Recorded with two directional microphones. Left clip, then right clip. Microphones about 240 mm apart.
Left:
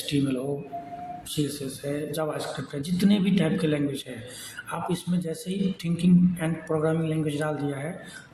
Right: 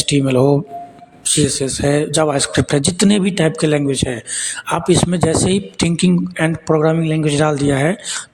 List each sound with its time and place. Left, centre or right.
0.0 s a man's voice: right